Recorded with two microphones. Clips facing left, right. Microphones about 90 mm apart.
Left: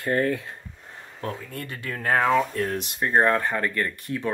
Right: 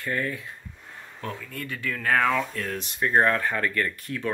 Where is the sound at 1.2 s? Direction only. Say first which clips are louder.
Left 2 dB; 35° left (ahead or behind).